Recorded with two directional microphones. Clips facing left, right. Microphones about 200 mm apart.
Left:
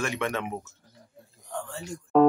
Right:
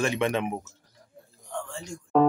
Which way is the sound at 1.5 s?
5° left (ahead or behind).